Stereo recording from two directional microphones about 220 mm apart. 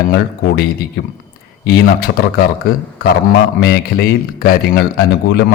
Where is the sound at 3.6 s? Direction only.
45° left (ahead or behind).